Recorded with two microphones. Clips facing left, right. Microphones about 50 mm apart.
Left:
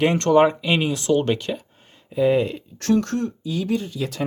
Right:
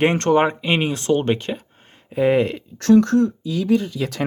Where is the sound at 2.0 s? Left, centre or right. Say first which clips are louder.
Right 1 dB; right.